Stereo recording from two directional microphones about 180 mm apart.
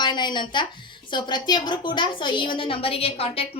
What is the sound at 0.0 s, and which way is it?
A woman's voice, 25° left (ahead or behind).